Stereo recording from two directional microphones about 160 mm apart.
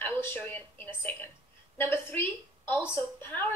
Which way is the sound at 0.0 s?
10° left (ahead or behind).